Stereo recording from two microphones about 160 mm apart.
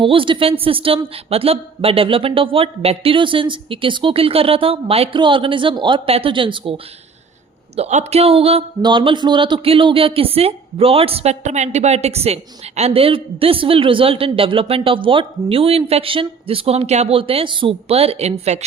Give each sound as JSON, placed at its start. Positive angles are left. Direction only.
{"t": 0.0, "sound": "speech", "side_deg": -35}
{"t": 7.8, "sound": "speech", "side_deg": -45}